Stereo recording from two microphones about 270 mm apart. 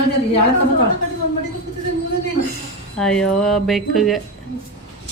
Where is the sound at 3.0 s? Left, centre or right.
Centre.